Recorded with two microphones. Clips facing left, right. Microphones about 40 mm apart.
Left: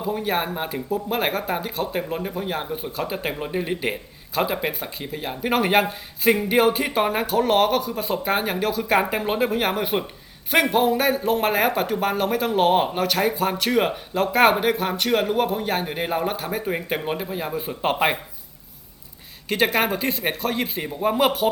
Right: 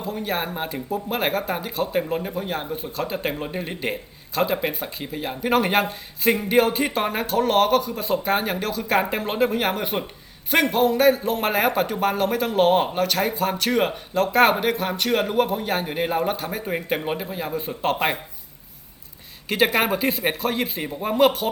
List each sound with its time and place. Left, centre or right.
0.0 s a man's voice: centre
19.5 s a man's voice: centre